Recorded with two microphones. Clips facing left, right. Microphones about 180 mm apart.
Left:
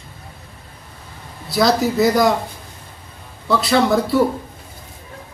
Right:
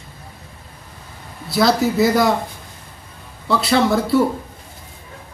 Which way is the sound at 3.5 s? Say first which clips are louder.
Left 1 dB; centre (ahead or behind).